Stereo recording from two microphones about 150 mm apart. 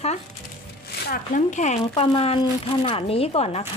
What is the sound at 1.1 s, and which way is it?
Speech, 60° left (ahead or behind).